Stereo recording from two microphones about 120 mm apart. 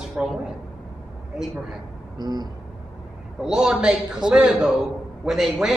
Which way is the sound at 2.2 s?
35° right (ahead or behind).